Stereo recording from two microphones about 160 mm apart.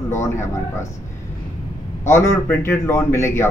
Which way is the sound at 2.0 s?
15° left (ahead or behind).